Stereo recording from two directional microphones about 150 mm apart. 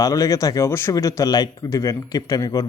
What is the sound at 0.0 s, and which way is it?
Speech, 20° left (ahead or behind).